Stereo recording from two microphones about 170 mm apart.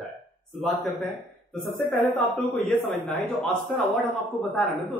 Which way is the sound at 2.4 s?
Centre (ahead or behind).